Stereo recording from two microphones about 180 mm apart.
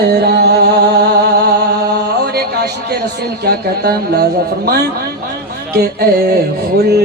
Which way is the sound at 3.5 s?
60° right (ahead or behind).